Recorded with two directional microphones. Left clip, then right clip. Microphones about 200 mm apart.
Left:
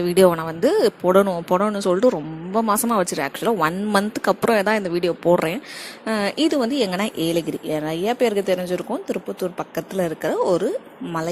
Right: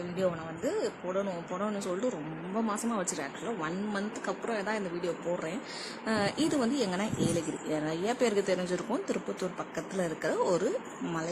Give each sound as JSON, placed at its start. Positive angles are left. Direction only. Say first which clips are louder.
{"t": 0.2, "sound": "speech", "louder": "left 16 dB", "side_deg": 40}